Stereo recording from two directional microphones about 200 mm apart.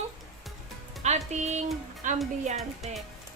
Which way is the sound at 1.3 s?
35° right (ahead or behind).